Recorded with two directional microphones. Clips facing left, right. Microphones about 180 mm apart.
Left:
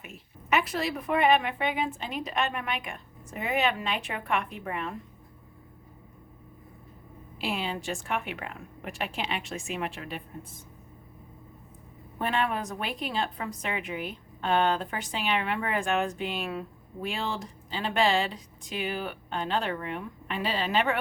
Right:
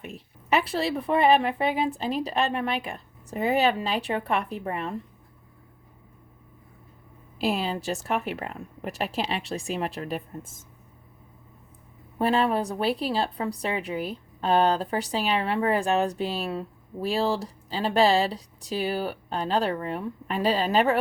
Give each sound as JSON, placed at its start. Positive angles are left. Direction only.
{"t": 0.0, "sound": "a woman's voice", "side_deg": -35}
{"t": 7.3, "sound": "a woman's voice", "side_deg": -40}
{"t": 12.2, "sound": "a woman's voice", "side_deg": -35}